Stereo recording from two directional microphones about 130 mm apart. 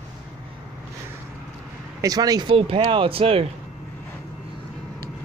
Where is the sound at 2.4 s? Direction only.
45° right (ahead or behind).